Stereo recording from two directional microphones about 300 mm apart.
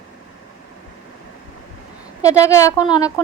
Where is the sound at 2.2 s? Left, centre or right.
Centre.